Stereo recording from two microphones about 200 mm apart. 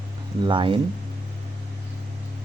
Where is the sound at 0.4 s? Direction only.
25° right (ahead or behind).